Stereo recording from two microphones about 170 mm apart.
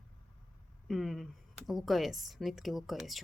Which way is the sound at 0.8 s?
Centre (ahead or behind).